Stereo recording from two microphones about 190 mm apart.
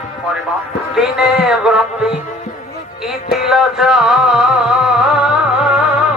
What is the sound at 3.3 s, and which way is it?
Music, centre (ahead or behind).